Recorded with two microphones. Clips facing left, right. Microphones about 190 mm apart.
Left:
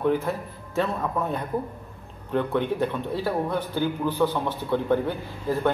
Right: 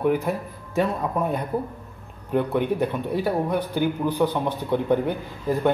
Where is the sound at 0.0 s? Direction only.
15° right (ahead or behind).